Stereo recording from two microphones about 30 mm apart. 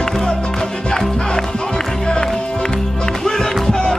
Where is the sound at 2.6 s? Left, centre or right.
Left.